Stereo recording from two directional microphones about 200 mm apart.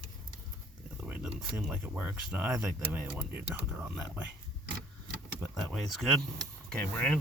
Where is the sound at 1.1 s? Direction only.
10° right (ahead or behind).